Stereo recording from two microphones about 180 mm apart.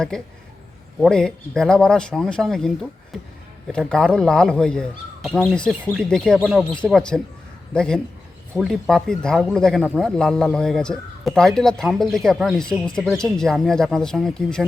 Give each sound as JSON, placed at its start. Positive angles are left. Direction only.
{"t": 0.1, "sound": "speech", "side_deg": 5}